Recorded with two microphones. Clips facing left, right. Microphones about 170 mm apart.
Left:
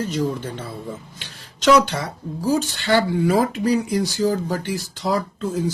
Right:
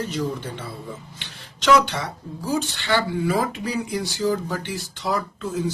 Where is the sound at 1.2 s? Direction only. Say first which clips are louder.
Left 5 dB; 45° left (ahead or behind).